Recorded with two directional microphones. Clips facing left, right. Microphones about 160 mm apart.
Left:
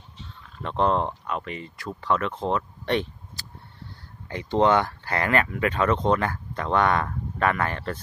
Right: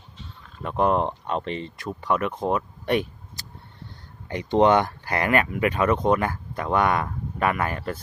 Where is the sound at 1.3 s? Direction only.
30° right (ahead or behind).